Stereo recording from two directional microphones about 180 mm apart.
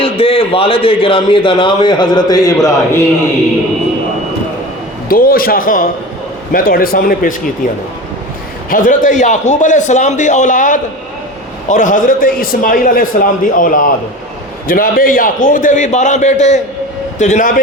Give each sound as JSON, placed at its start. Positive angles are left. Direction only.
{"t": 0.0, "sound": "a man's voice", "side_deg": 30}
{"t": 5.0, "sound": "a man's voice", "side_deg": 55}
{"t": 8.7, "sound": "a man's voice", "side_deg": 50}